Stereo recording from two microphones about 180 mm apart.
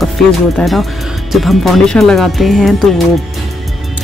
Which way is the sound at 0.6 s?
Centre (ahead or behind).